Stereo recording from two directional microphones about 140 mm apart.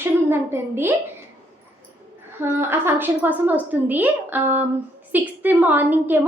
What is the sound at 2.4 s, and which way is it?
A woman's voice, 15° right (ahead or behind).